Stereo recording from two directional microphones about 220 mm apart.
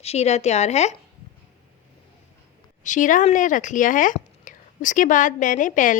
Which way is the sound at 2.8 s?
35° left (ahead or behind).